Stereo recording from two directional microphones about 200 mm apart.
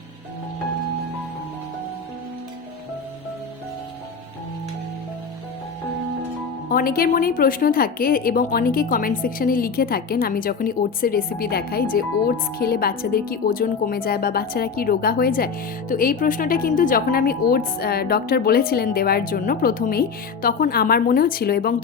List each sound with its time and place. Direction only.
6.7 s a woman's voice: 45° left (ahead or behind)